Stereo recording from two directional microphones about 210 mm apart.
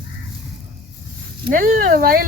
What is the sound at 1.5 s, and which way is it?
Speech, 40° right (ahead or behind).